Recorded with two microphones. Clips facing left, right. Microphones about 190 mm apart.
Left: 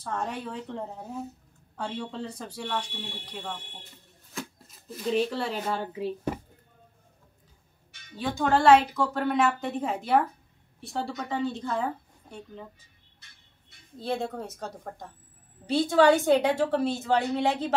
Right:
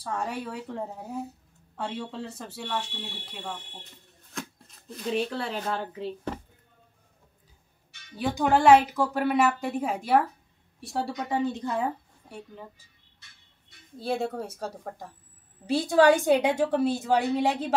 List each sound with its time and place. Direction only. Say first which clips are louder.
0.0 s a woman's voice: right 1 dB; 10° right (ahead or behind); by 6.4 s 10° left (ahead or behind)
8.2 s a woman's voice: right 1 dB; 15° right (ahead or behind)
13.9 s a woman's voice: right 2 dB; 5° right (ahead or behind)